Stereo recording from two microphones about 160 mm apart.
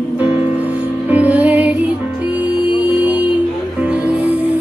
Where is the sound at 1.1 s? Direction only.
10° right (ahead or behind).